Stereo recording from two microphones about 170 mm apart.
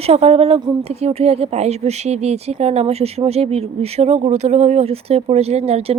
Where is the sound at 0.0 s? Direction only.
35° right (ahead or behind).